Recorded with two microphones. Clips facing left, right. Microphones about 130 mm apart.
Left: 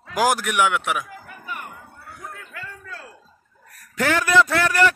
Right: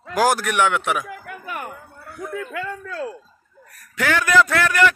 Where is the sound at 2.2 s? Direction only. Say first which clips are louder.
Right 11 dB; 75° right (ahead or behind).